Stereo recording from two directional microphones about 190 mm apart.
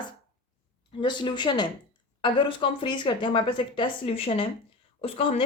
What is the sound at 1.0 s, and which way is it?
A woman's voice, 25° left (ahead or behind).